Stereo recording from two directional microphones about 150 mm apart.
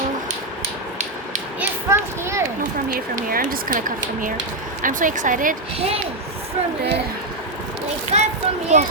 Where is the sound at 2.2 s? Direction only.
20° right (ahead or behind).